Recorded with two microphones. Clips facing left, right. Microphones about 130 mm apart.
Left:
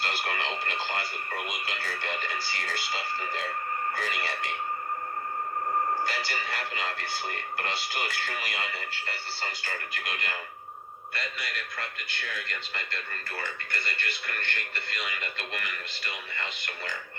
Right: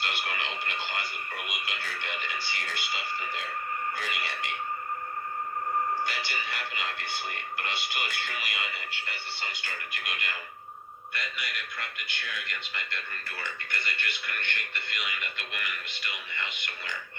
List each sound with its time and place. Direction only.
0.0 s speech: 35° left (ahead or behind)
6.1 s speech: 35° left (ahead or behind)